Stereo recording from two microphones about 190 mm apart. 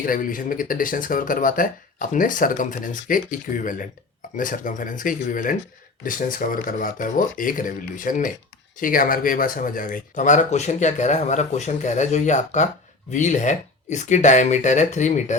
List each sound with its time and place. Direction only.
0.0 s speech: 45° left (ahead or behind)